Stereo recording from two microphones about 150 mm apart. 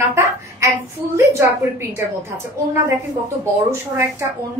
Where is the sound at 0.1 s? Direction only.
20° right (ahead or behind).